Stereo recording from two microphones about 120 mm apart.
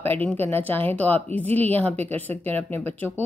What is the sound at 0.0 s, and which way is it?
A woman's voice, 15° left (ahead or behind).